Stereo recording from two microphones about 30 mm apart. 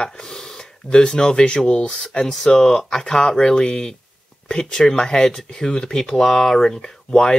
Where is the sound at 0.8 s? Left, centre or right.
Left.